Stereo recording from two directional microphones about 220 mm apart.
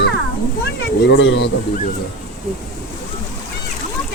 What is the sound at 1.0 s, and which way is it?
Speech, 55° left (ahead or behind).